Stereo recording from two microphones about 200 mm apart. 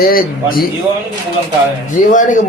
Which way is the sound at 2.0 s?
40° left (ahead or behind).